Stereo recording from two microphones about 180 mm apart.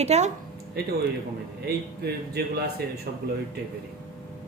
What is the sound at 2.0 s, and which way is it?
Speech, 60° right (ahead or behind).